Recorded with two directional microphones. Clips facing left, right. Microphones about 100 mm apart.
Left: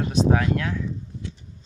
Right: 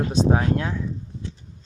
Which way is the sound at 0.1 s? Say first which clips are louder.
Left 1 dB; 30° right (ahead or behind).